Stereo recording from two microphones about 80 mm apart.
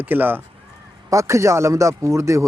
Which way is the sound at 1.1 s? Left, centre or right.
Right.